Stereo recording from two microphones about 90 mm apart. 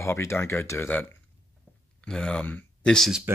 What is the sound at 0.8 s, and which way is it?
Speech, 20° left (ahead or behind).